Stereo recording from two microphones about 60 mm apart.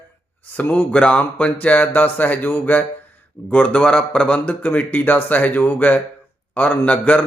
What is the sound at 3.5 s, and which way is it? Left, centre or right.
A man's voice, left.